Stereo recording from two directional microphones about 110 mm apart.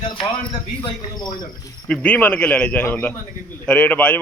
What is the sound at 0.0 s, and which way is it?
Speech, 50° left (ahead or behind).